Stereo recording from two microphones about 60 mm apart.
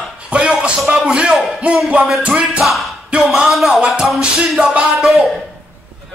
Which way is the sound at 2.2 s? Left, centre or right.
Right.